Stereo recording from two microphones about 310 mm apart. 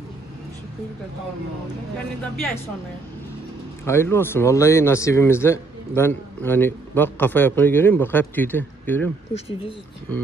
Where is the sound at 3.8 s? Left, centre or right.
Centre.